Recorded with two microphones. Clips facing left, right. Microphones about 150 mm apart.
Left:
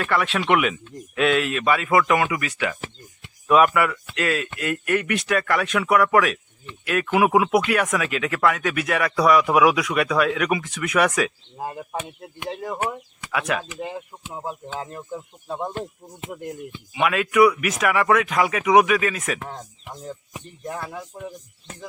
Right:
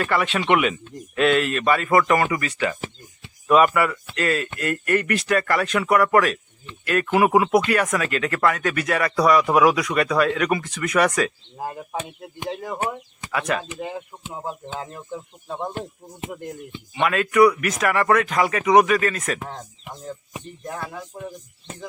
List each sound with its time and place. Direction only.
0.0 s speech: centre (ahead or behind)
14.8 s speech: centre (ahead or behind)
20.7 s speech: centre (ahead or behind)